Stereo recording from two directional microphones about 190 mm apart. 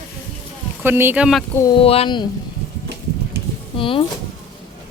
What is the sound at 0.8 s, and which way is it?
Speech, 10° right (ahead or behind).